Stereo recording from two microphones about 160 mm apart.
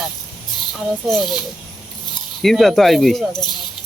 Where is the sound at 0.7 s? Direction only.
Centre (ahead or behind).